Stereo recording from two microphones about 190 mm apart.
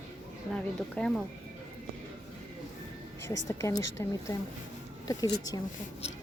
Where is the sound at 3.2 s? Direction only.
15° left (ahead or behind).